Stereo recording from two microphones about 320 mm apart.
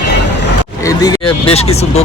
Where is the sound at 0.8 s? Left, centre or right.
Centre.